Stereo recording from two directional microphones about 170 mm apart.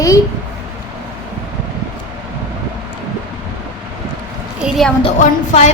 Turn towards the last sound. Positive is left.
turn(degrees=45)  # may be behind; listen again after turning